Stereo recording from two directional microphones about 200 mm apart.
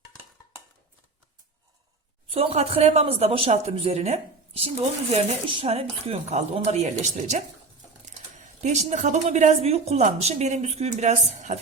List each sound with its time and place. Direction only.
2.3 s speech: 30° right (ahead or behind)